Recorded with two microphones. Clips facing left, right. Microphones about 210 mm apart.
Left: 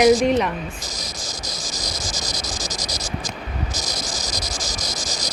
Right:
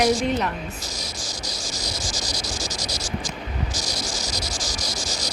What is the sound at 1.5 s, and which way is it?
Cricket, 20° left (ahead or behind).